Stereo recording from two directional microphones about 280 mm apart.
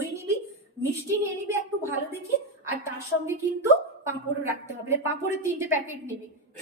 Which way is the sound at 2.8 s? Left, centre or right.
Centre.